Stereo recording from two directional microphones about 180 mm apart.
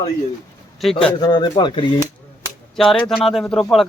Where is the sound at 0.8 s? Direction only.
Centre (ahead or behind).